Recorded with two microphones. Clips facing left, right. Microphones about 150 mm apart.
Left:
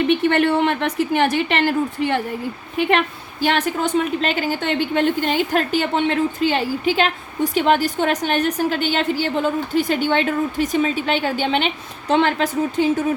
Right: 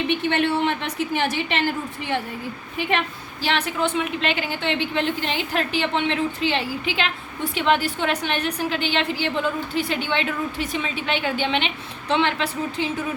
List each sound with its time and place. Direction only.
0.3 s a woman's voice: 55° left (ahead or behind)
3.4 s a woman's voice: 45° left (ahead or behind)